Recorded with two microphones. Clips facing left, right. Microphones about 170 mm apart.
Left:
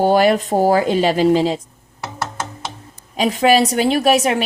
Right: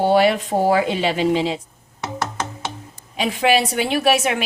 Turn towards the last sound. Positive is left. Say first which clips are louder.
# left 3 dB
turn(degrees=35)  # may be behind; listen again after turning